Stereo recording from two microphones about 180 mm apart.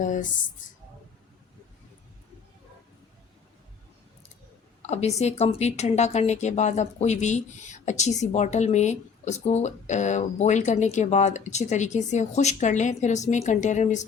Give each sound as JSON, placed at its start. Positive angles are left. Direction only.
{"t": 0.0, "sound": "speech", "side_deg": 45}
{"t": 4.8, "sound": "speech", "side_deg": 40}